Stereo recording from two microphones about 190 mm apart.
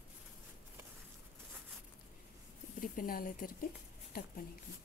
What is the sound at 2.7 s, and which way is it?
A woman's voice, 50° left (ahead or behind).